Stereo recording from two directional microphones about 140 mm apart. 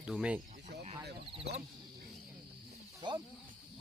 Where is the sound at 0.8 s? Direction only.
45° right (ahead or behind).